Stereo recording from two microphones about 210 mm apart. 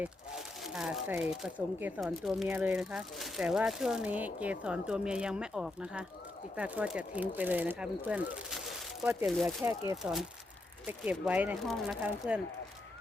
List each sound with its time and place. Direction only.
0.0 s speech: centre (ahead or behind)
9.6 s speech: 15° right (ahead or behind)
10.0 s speech: centre (ahead or behind)